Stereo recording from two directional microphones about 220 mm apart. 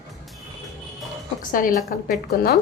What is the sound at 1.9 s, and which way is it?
Speech, 40° left (ahead or behind).